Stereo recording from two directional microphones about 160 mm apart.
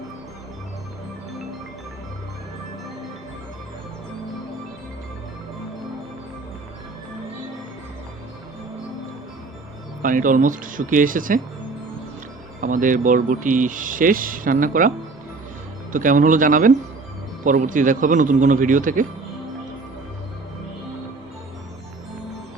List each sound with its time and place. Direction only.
10.0 s speech: 55° right (ahead or behind)
12.6 s speech: 55° right (ahead or behind)